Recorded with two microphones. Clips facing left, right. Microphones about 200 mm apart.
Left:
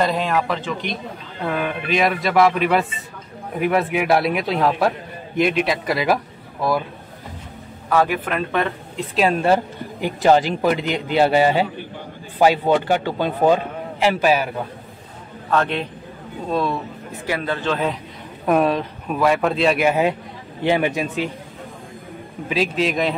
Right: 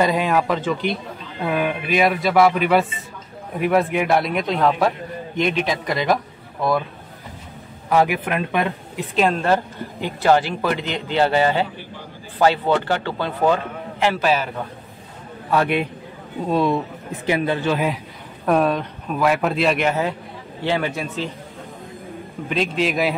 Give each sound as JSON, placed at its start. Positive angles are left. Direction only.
{"t": 0.0, "sound": "a man's voice", "side_deg": -10}
{"t": 7.9, "sound": "speech", "side_deg": -15}
{"t": 9.4, "sound": "a man's voice", "side_deg": 15}
{"t": 15.5, "sound": "speech", "side_deg": -10}
{"t": 18.4, "sound": "a man's voice", "side_deg": 5}
{"t": 22.5, "sound": "a man's voice", "side_deg": 0}